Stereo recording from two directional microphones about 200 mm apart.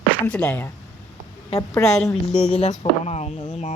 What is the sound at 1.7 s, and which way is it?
Speech, 15° left (ahead or behind).